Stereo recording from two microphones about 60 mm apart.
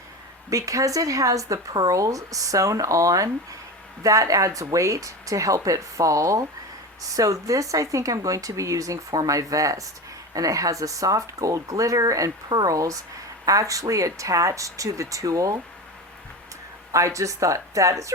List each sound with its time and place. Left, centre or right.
0.5 s speech: right
16.9 s speech: right